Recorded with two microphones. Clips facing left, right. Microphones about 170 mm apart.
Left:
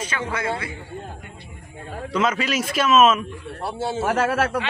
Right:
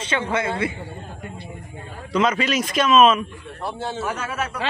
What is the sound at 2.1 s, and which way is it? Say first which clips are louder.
A man's voice: right 2 dB; 5° left (ahead or behind).